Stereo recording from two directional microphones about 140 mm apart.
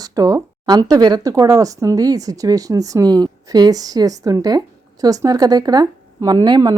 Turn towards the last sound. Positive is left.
turn(degrees=-30)  # may be behind; listen again after turning